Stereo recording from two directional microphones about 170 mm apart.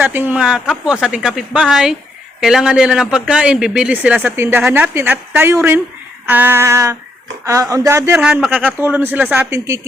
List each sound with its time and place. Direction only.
0.0 s speech: 10° right (ahead or behind)
8.2 s speech: 5° right (ahead or behind)